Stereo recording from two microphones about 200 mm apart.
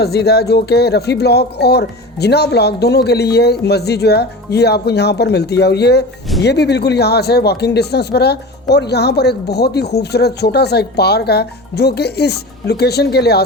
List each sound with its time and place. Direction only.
0.0 s speech: 55° left (ahead or behind)